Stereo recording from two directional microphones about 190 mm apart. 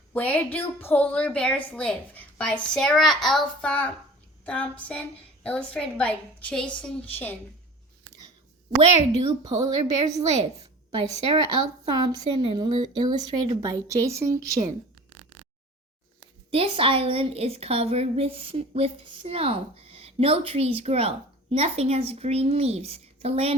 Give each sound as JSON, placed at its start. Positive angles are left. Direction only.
{"t": 0.1, "sound": "a woman's voice", "side_deg": 10}
{"t": 8.8, "sound": "a woman's voice", "side_deg": -35}
{"t": 9.4, "sound": "speech", "side_deg": -20}
{"t": 10.3, "sound": "a woman's voice", "side_deg": -35}
{"t": 11.9, "sound": "speech", "side_deg": -20}
{"t": 16.5, "sound": "a woman's voice", "side_deg": -30}